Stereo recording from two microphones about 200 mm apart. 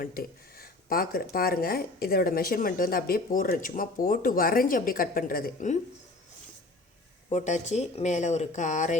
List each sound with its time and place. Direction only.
0.0 s speech: 45° left (ahead or behind)
7.3 s speech: 35° left (ahead or behind)